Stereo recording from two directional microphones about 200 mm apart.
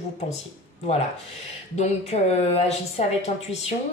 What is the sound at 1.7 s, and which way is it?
Speech, 35° left (ahead or behind).